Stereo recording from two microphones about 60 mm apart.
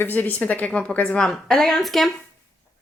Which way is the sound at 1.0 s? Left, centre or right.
Centre.